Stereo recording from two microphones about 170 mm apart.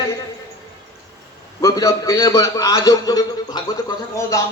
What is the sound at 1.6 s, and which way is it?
A man's voice, 15° left (ahead or behind).